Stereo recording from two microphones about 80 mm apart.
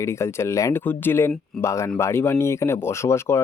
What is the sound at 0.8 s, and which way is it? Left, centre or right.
Speech, left.